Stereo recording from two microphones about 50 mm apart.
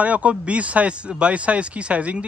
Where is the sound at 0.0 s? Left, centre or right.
Right.